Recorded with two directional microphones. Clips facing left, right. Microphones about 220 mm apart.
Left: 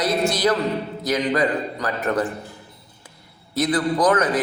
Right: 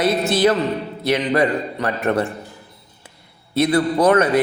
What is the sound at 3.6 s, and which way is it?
Speech, 25° right (ahead or behind).